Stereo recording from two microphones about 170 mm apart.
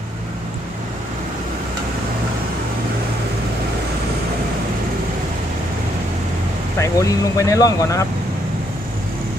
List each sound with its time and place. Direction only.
6.7 s speech: 20° left (ahead or behind)